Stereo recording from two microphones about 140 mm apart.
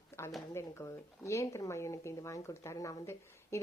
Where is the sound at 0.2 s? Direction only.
20° left (ahead or behind).